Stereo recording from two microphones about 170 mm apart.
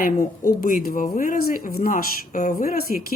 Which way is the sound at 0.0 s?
55° left (ahead or behind).